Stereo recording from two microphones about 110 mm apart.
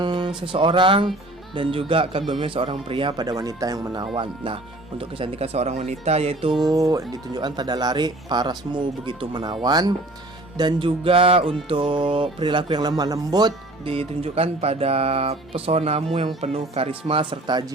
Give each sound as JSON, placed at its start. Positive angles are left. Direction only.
{"t": 0.0, "sound": "music", "side_deg": -45}
{"t": 1.5, "sound": "speech", "side_deg": -55}
{"t": 3.2, "sound": "speech", "side_deg": -30}
{"t": 4.1, "sound": "speech", "side_deg": -50}
{"t": 6.5, "sound": "speech", "side_deg": -35}
{"t": 10.6, "sound": "music", "side_deg": -45}
{"t": 13.0, "sound": "speech", "side_deg": -35}
{"t": 13.8, "sound": "speech", "side_deg": -60}
{"t": 17.1, "sound": "music", "side_deg": -55}